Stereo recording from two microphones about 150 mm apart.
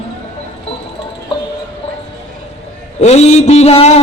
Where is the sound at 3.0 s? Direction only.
45° left (ahead or behind).